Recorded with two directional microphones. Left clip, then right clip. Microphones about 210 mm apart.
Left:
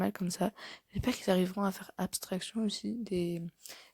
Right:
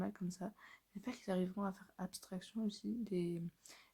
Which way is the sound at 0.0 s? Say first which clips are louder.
Left 12 dB; 35° left (ahead or behind).